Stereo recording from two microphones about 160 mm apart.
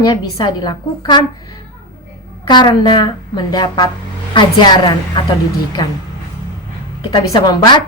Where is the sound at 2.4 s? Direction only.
25° left (ahead or behind).